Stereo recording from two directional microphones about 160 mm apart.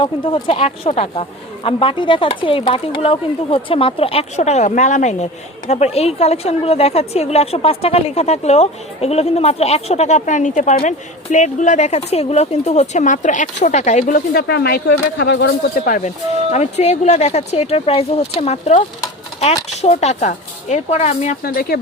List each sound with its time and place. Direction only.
0.0 s speech: 30° left (ahead or behind); by 14.2 s 50° left (ahead or behind)
14.3 s speech: 85° left
15.9 s speech: 45° left (ahead or behind)
19.8 s speech: 45° left (ahead or behind)
21.4 s speech: 70° left (ahead or behind)